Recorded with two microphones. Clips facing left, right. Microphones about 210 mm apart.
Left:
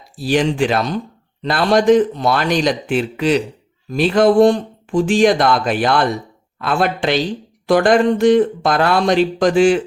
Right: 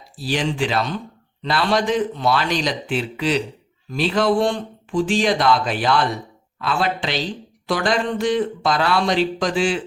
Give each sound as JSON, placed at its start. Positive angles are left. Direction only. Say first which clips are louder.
{"t": 0.2, "sound": "speech", "louder": "left 6 dB", "side_deg": 50}